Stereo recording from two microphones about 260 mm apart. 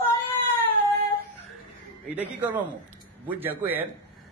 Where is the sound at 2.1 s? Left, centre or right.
Centre.